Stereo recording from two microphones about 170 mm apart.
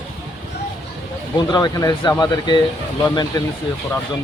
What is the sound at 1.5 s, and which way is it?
Speech, 25° left (ahead or behind).